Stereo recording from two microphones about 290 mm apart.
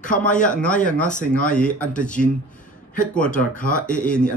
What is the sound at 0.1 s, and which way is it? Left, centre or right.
Speech, centre.